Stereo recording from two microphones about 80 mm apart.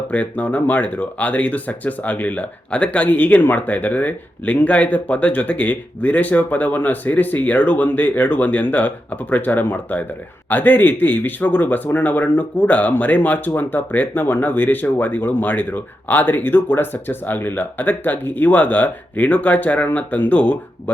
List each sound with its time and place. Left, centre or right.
0.1 s speech: centre